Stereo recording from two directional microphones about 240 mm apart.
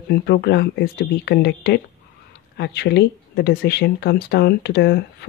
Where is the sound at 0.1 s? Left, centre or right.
Left.